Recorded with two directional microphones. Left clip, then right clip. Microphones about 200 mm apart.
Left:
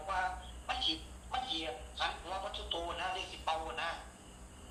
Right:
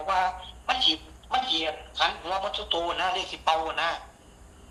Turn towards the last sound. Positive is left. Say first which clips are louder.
# right 12 dB
turn(degrees=-55)  # may be behind; listen again after turning